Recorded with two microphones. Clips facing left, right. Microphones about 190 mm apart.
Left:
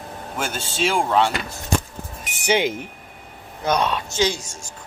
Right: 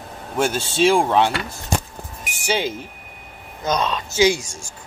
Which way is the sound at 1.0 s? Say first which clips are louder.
Right 1 dB; 15° right (ahead or behind).